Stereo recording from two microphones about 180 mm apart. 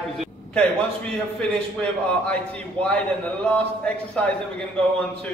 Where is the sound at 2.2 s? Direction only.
5° left (ahead or behind).